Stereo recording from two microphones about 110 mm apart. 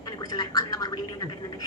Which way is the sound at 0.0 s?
35° left (ahead or behind).